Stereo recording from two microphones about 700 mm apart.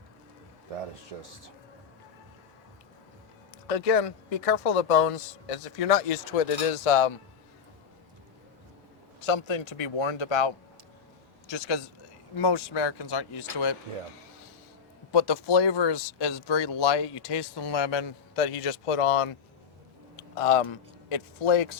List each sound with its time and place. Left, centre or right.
1.2 s speech: right
3.7 s speech: left
9.2 s speech: left
15.1 s speech: left
20.3 s speech: left